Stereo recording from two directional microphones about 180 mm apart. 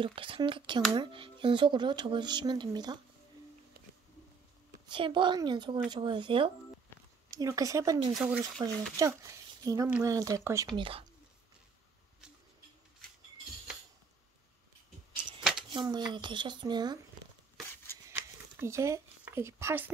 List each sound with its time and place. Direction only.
0.0 s speech: 30° right (ahead or behind)
3.8 s music: 55° right (ahead or behind)
4.8 s speech: 25° right (ahead or behind)
9.8 s speech: 10° right (ahead or behind)
10.1 s speech: 20° right (ahead or behind)
10.8 s speech: 30° right (ahead or behind)
15.7 s speech: 25° right (ahead or behind)
18.1 s a sound: 15° right (ahead or behind)